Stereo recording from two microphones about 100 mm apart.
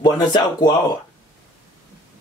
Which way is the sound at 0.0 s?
45° left (ahead or behind).